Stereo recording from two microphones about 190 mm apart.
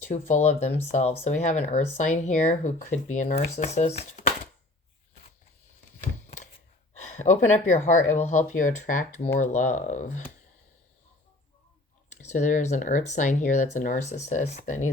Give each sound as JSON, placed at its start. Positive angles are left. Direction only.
{"t": 0.1, "sound": "speech", "side_deg": 35}
{"t": 6.2, "sound": "a sound", "side_deg": 40}
{"t": 7.0, "sound": "speech", "side_deg": 35}
{"t": 12.1, "sound": "speech", "side_deg": 40}